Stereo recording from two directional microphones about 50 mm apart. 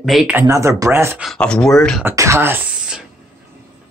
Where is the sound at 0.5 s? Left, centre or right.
Right.